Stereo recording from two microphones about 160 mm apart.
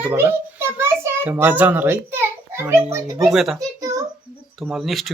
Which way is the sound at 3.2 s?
Centre (ahead or behind).